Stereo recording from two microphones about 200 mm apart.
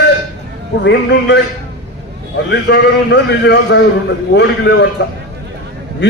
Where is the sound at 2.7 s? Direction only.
60° left (ahead or behind).